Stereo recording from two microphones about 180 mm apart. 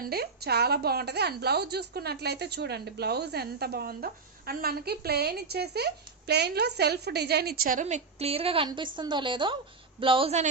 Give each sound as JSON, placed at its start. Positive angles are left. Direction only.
{"t": 0.0, "sound": "a woman's voice", "side_deg": -60}